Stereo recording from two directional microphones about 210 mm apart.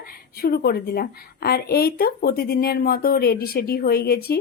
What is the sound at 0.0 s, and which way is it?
A woman's voice, 45° left (ahead or behind).